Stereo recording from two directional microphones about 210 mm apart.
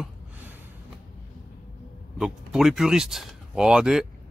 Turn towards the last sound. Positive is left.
turn(degrees=-5)  # may be behind; listen again after turning